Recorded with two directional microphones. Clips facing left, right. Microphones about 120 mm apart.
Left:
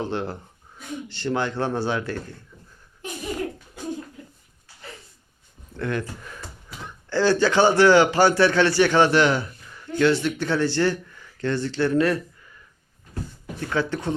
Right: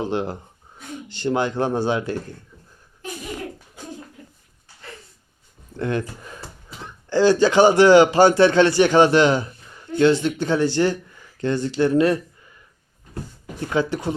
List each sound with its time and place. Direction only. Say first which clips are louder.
0.0 s speech: right 3 dB; 15° right (ahead or behind)
5.7 s a man's voice: right 3 dB; 25° right (ahead or behind)
13.7 s speech: right 3 dB; 15° right (ahead or behind)